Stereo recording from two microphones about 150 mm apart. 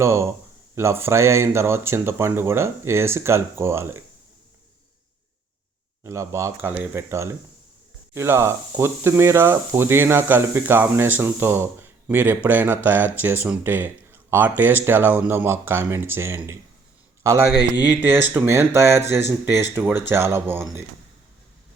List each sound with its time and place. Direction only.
0.0 s speech: 20° right (ahead or behind)
6.0 s speech: 20° right (ahead or behind)